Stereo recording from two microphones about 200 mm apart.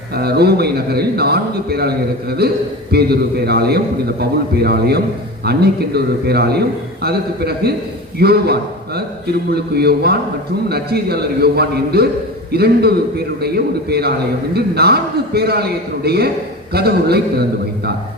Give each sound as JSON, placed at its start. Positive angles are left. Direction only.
{"t": 0.2, "sound": "a man's voice", "side_deg": -55}
{"t": 14.5, "sound": "a man's voice", "side_deg": -50}